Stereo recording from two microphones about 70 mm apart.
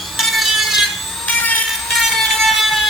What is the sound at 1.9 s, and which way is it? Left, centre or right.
Vehicle, centre.